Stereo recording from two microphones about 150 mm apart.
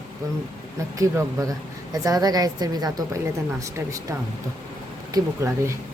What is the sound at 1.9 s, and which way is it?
Speech, 25° right (ahead or behind).